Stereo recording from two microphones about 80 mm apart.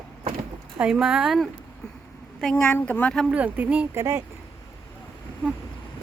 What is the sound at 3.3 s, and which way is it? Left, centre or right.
Speech, centre.